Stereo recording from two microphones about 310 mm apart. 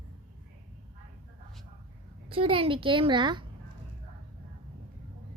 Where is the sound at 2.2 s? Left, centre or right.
Centre.